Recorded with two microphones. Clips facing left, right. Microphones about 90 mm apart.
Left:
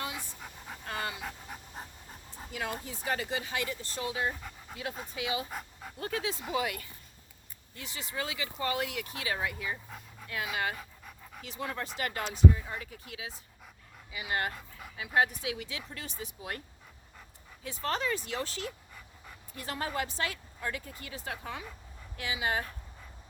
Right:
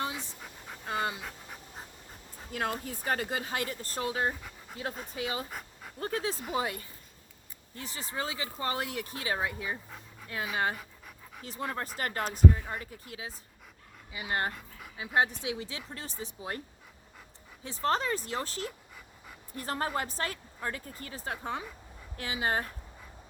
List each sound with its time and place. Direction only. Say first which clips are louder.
0.9 s dog: right 4 dB; 25° right (ahead or behind)
1.2 s dog: left 2 dB; 5° left (ahead or behind)
2.5 s a woman's voice: right 3 dB; 50° right (ahead or behind)
5.5 s dog: left 2 dB; centre (ahead or behind)
6.0 s a woman's voice: right 2 dB; 35° right (ahead or behind)
10.8 s dog: even; centre (ahead or behind)
11.4 s a woman's voice: right 2 dB; 40° right (ahead or behind)
17.6 s a woman's voice: right 3 dB; 35° right (ahead or behind)